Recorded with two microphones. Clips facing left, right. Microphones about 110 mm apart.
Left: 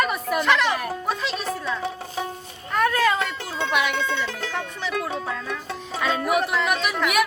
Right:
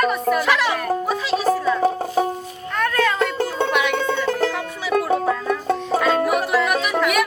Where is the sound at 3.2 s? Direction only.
45° right (ahead or behind).